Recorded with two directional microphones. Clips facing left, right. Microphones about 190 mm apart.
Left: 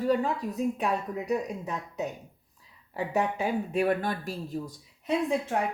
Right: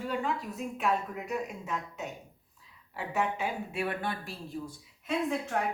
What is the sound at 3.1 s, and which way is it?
A woman's voice, 40° left (ahead or behind).